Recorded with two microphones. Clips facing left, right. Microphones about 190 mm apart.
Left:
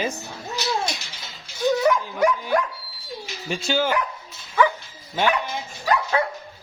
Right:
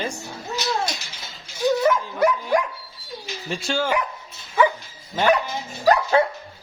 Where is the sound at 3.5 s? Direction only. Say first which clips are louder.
Left 2 dB; centre (ahead or behind).